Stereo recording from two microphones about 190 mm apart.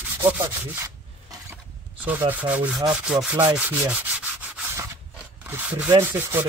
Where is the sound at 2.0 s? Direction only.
10° right (ahead or behind).